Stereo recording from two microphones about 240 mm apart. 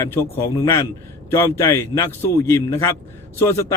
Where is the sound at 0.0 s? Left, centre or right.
Centre.